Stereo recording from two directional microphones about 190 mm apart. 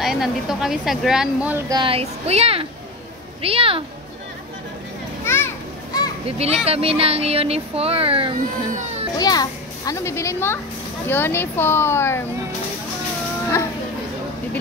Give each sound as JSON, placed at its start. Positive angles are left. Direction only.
{"t": 0.0, "sound": "a woman's voice", "side_deg": 0}
{"t": 1.7, "sound": "speech", "side_deg": -25}
{"t": 5.2, "sound": "children playing", "side_deg": 10}
{"t": 6.3, "sound": "speech", "side_deg": -35}
{"t": 9.2, "sound": "a child's voice", "side_deg": 20}